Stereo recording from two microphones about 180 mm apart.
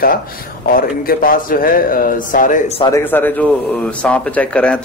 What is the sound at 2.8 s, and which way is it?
A man's voice, 15° left (ahead or behind).